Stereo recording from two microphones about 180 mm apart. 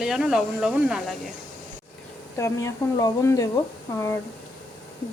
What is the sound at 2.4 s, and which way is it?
Speech, 15° left (ahead or behind).